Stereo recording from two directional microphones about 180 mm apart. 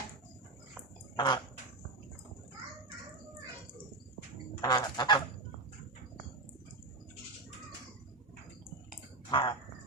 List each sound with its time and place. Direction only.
1.1 s speech: 25° left (ahead or behind)
4.6 s goose: 25° left (ahead or behind)
9.3 s speech: 25° left (ahead or behind)